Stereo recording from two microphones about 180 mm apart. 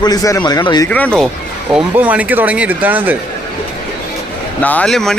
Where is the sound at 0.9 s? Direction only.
5° left (ahead or behind).